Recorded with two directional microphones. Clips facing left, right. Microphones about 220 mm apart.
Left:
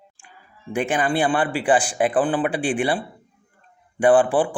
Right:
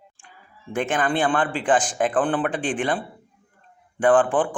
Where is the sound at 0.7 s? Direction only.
10° left (ahead or behind).